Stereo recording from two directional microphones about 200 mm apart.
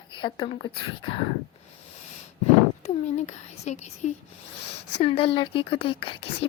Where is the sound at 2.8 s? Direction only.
35° left (ahead or behind).